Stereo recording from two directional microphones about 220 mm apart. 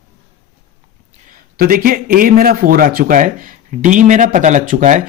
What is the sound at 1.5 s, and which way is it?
Speech, 45° right (ahead or behind).